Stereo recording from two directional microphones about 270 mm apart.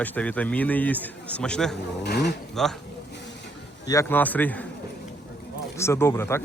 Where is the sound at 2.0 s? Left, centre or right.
Left.